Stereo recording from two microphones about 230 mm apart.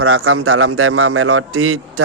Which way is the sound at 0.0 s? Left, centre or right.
Right.